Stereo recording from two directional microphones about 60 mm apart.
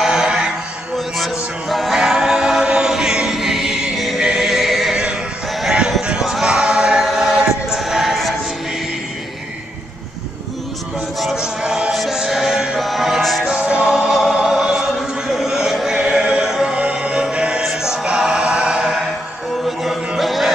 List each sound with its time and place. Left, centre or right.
0.0 s music: centre
0.9 s music: centre
4.2 s neigh: centre
5.6 s a sound: centre
6.0 s music: centre
11.3 s music: centre
13.5 s music: centre
13.9 s music: centre
15.3 s chant: centre
17.6 s music: centre
19.6 s music: centre